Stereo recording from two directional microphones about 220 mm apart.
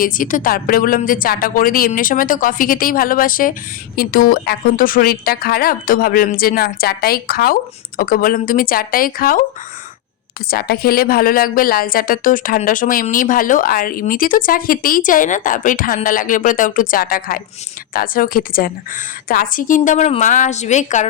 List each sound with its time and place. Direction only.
0.0 s a woman's voice: 40° left (ahead or behind)
10.5 s a woman's voice: 45° left (ahead or behind)